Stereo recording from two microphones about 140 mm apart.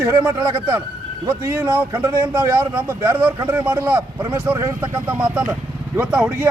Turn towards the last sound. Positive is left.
turn(degrees=-10)  # may be behind; listen again after turning